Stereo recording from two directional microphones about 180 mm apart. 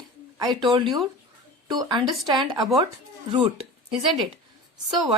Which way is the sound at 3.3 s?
30° right (ahead or behind).